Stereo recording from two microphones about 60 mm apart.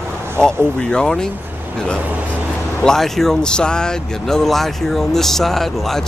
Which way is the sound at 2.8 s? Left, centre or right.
Centre.